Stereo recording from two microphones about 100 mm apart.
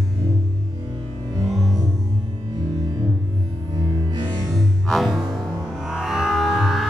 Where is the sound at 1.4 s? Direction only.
Centre (ahead or behind).